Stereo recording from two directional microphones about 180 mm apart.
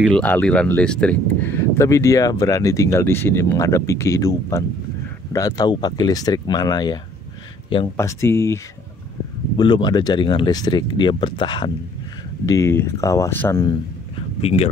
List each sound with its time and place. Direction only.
0.0 s speech: 5° left (ahead or behind); by 7.0 s 20° left (ahead or behind)
8.0 s speech: 15° left (ahead or behind)
9.6 s speech: 25° left (ahead or behind)
12.4 s speech: 15° left (ahead or behind)
14.4 s speech: 35° left (ahead or behind)